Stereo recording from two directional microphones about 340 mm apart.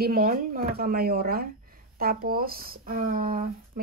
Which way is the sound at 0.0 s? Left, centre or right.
Right.